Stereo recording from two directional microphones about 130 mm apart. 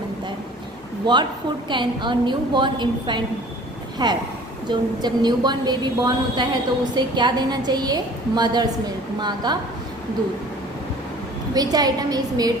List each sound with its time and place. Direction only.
1.0 s a woman's voice: 35° right (ahead or behind)
11.5 s a woman's voice: 30° right (ahead or behind)